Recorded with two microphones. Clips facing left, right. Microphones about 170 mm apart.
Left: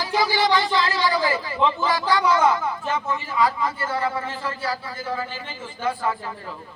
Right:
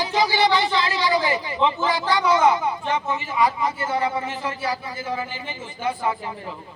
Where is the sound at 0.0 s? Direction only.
20° right (ahead or behind).